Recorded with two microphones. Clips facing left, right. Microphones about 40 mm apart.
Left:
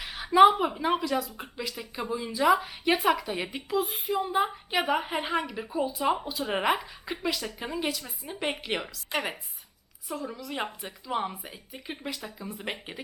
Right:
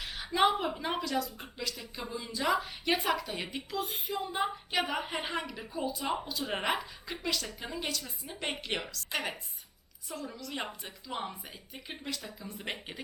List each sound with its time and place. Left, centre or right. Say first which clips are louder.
0.0 s a woman's voice: left 9 dB; centre